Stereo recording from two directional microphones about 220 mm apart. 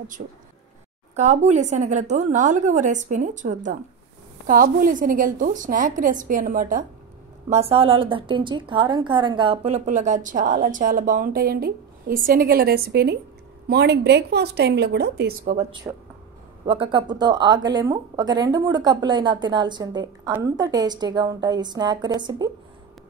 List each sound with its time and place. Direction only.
0.2 s a woman's voice: 35° right (ahead or behind)
15.5 s a woman's voice: 20° right (ahead or behind)